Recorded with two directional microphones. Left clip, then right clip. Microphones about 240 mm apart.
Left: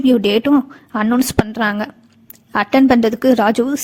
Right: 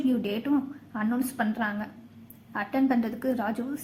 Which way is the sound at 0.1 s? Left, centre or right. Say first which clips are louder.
Left 15 dB; left.